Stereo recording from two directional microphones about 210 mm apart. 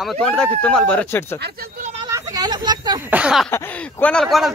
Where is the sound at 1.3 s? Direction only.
50° right (ahead or behind).